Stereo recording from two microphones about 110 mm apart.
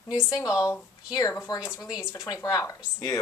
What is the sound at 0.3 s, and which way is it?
Speech, 30° left (ahead or behind).